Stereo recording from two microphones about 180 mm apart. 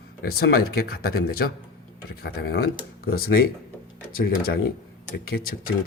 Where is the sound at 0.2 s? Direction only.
55° left (ahead or behind).